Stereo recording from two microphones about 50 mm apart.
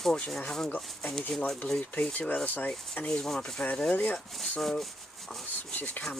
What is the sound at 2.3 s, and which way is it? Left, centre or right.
Speech, left.